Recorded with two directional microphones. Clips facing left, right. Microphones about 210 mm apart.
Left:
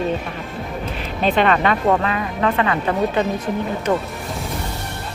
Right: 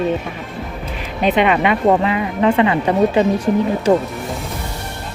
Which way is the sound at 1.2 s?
15° right (ahead or behind).